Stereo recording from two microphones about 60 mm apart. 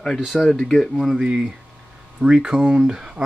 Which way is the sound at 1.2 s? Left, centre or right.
Centre.